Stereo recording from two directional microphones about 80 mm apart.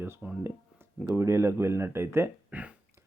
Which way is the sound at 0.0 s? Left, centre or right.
Right.